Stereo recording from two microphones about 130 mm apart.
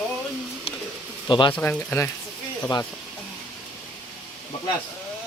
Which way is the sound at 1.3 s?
40° left (ahead or behind).